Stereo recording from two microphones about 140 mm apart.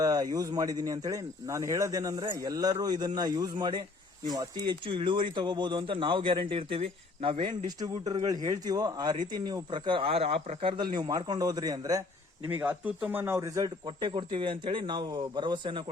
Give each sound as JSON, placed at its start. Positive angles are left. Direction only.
{"t": 0.0, "sound": "speech", "side_deg": -25}
{"t": 12.5, "sound": "speech", "side_deg": -15}
{"t": 13.8, "sound": "speech", "side_deg": -35}